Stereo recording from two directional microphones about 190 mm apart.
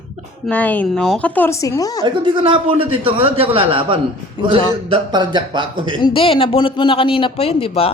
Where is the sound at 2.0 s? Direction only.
25° right (ahead or behind).